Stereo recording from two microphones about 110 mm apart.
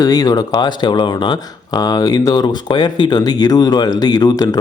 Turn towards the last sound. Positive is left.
turn(degrees=40)  # may be behind; listen again after turning